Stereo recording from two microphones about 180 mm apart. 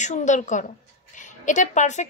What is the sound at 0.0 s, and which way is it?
A woman's voice, 40° left (ahead or behind).